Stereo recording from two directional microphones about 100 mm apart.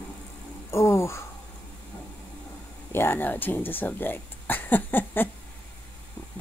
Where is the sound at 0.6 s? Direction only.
30° left (ahead or behind).